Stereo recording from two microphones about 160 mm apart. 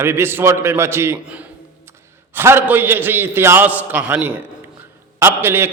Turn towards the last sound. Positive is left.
turn(degrees=-15)  # may be behind; listen again after turning